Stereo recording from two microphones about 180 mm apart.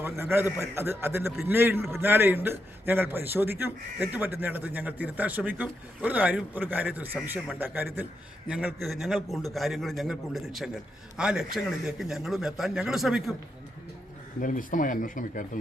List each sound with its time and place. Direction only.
0.0 s a man's voice: 15° right (ahead or behind)
14.4 s speech: 45° left (ahead or behind)